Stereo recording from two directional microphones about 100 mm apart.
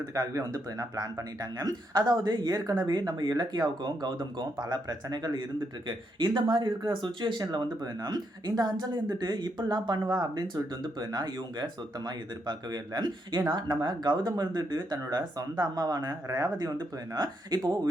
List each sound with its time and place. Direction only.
0.0 s speech: 35° right (ahead or behind)